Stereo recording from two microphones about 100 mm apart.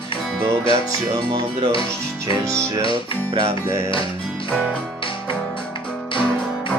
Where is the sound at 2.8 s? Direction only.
60° left (ahead or behind).